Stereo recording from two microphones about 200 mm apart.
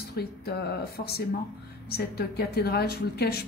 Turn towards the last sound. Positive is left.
turn(degrees=50)  # may be behind; listen again after turning